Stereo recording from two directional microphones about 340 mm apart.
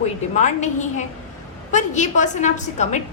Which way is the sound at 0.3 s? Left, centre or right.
Left.